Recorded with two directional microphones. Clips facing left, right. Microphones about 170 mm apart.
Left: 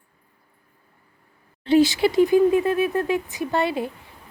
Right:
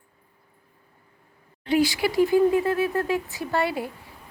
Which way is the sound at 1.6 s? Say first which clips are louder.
Left 5 dB; 25° left (ahead or behind).